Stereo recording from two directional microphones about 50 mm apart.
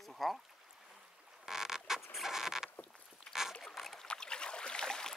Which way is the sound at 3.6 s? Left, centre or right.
Centre.